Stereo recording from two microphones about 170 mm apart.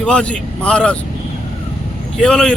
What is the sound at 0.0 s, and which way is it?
Speech, 5° left (ahead or behind).